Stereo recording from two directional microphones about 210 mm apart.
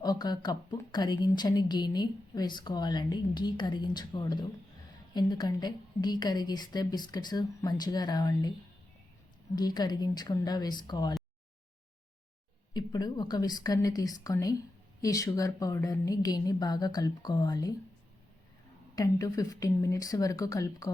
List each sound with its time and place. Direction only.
0.0 s a woman's voice: 20° left (ahead or behind)
9.6 s a woman's voice: 20° left (ahead or behind)
12.7 s a woman's voice: 20° left (ahead or behind)
18.9 s a woman's voice: 15° left (ahead or behind)